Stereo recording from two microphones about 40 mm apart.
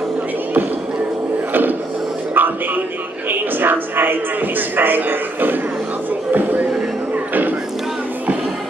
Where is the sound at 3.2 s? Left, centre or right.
Right.